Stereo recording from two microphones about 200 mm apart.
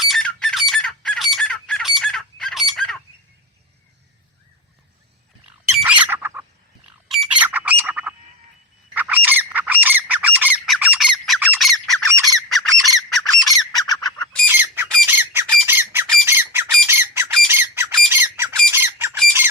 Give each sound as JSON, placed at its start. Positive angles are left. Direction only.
{"t": 0.0, "sound": "squawk", "side_deg": 0}
{"t": 5.5, "sound": "bird", "side_deg": -5}
{"t": 9.0, "sound": "squawk", "side_deg": -10}
{"t": 13.5, "sound": "bird", "side_deg": 20}
{"t": 14.0, "sound": "bird", "side_deg": 5}
{"t": 14.4, "sound": "squawk", "side_deg": -10}